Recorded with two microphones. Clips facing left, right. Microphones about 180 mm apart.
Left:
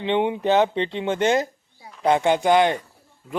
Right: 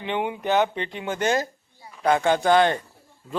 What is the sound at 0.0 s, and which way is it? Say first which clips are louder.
Speech: left 5 dB; 25° left (ahead or behind).